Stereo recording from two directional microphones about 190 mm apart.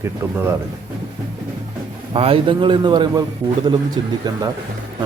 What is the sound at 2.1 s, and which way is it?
A man's voice, 30° right (ahead or behind).